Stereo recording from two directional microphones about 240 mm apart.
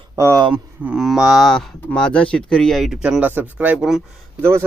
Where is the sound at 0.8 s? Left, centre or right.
Centre.